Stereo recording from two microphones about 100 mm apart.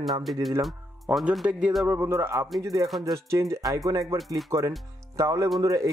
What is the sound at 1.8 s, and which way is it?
Speech, 20° right (ahead or behind).